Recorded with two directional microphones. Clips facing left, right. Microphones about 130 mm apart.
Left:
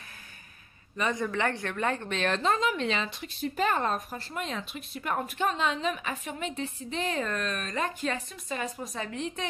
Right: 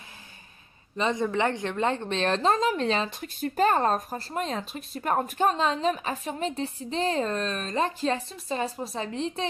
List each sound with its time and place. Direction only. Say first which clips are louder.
0.9 s a woman's voice: right 4 dB; 25° right (ahead or behind)